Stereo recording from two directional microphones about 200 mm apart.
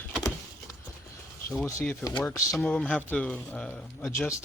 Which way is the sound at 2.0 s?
10° left (ahead or behind).